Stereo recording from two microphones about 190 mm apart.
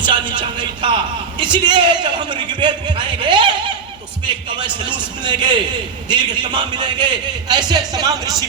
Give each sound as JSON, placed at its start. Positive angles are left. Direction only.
{"t": 0.0, "sound": "a man's voice", "side_deg": -25}
{"t": 3.2, "sound": "snicker", "side_deg": -25}
{"t": 4.3, "sound": "a man's voice", "side_deg": -25}